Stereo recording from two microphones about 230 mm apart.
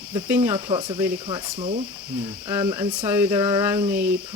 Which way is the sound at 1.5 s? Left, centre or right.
Right.